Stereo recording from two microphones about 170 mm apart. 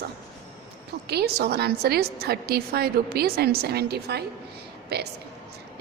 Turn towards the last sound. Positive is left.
turn(degrees=-75)  # may be behind; listen again after turning